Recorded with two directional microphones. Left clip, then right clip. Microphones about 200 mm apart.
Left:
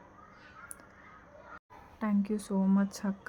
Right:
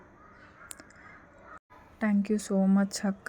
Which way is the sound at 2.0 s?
15° right (ahead or behind).